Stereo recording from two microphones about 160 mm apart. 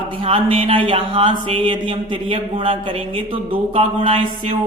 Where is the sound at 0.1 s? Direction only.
35° right (ahead or behind).